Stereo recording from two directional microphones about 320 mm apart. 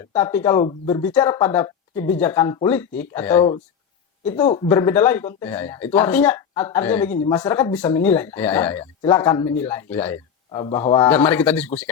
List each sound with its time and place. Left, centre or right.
0.1 s speech: centre